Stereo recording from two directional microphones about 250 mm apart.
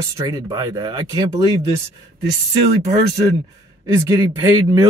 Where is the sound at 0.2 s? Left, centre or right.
Centre.